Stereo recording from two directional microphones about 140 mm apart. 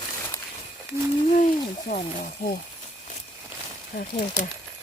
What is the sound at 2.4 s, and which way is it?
Speech, 85° left.